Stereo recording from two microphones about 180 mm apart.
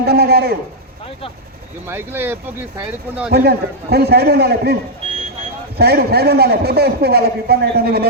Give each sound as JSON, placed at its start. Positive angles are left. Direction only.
{"t": 0.0, "sound": "a sound", "side_deg": -60}
{"t": 1.9, "sound": "speech", "side_deg": -10}
{"t": 3.3, "sound": "a man's voice", "side_deg": -60}